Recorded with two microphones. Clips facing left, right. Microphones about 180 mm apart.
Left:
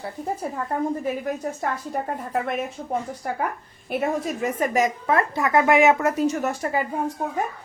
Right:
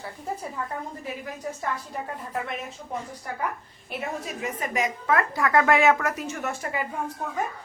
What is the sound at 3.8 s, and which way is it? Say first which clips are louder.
Speech: left 8 dB; 50° left (ahead or behind).